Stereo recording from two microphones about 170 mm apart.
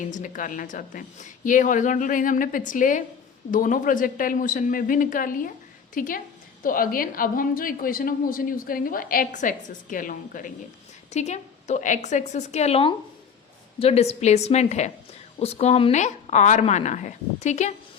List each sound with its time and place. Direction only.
0.1 s a woman's voice: 50° left (ahead or behind)
11.1 s a woman's voice: 40° left (ahead or behind)